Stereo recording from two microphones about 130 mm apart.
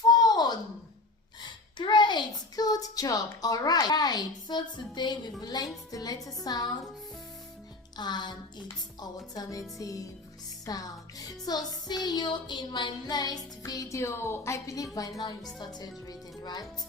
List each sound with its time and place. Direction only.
0.0 s a sound: 30° left (ahead or behind)
5.4 s speech: 30° left (ahead or behind)
7.9 s speech: 35° left (ahead or behind)